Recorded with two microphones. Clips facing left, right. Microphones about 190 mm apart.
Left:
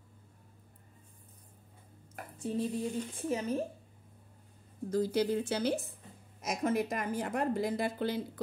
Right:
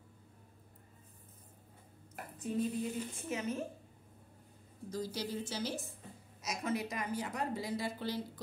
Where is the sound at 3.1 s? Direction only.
35° left (ahead or behind).